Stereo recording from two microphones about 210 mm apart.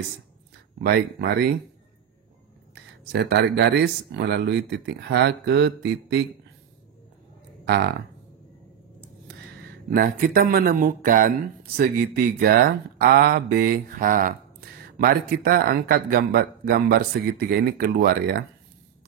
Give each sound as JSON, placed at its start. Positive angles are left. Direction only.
{"t": 0.7, "sound": "speech", "side_deg": -45}
{"t": 2.7, "sound": "speech", "side_deg": -50}
{"t": 7.6, "sound": "speech", "side_deg": -55}
{"t": 9.9, "sound": "speech", "side_deg": -45}